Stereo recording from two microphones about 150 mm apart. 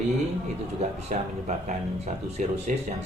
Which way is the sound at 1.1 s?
60° right (ahead or behind).